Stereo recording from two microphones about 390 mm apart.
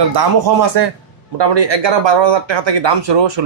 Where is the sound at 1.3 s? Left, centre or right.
Right.